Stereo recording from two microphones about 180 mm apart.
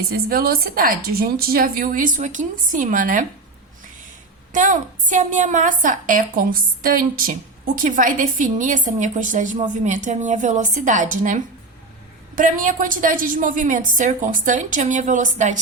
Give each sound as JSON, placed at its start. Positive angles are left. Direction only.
{"t": 0.3, "sound": "a woman's voice", "side_deg": -55}
{"t": 4.5, "sound": "a woman's voice", "side_deg": -45}
{"t": 12.4, "sound": "a woman's voice", "side_deg": -45}